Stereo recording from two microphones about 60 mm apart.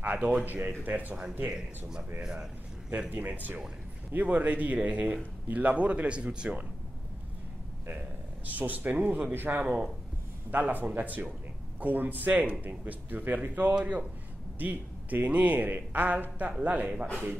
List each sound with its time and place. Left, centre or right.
0.0 s speech: right
1.5 s speech: centre
3.1 s speech: right
8.5 s speech: right
9.6 s speech: right